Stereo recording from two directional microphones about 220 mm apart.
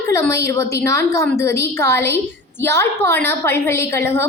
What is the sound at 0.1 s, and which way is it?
A woman's voice, 15° left (ahead or behind).